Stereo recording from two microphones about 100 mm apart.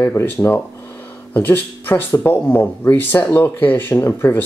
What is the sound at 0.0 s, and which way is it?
Speech, 20° left (ahead or behind).